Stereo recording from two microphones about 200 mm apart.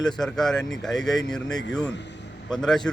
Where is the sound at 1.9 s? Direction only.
60° left (ahead or behind).